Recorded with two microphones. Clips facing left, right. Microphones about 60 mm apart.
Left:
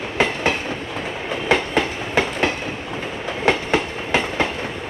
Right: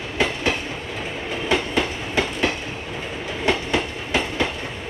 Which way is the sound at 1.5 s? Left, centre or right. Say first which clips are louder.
Left 3 dB; left.